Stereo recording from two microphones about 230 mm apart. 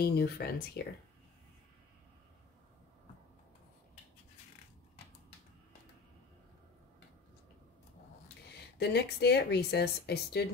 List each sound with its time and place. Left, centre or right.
0.0 s speech: left
8.7 s speech: left